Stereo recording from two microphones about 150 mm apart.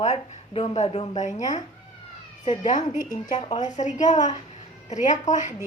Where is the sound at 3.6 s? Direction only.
50° left (ahead or behind).